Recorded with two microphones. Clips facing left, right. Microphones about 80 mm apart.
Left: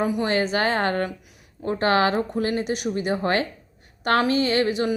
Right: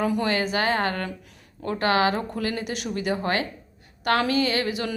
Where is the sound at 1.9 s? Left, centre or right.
Left.